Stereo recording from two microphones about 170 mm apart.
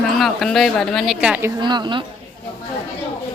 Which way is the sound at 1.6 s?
25° right (ahead or behind).